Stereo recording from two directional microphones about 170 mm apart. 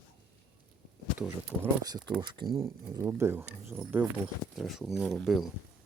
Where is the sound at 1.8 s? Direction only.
25° right (ahead or behind).